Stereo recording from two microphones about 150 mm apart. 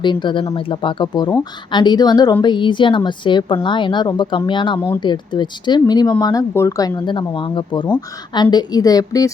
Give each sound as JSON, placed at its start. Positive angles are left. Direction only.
{"t": 0.0, "sound": "a woman's voice", "side_deg": 30}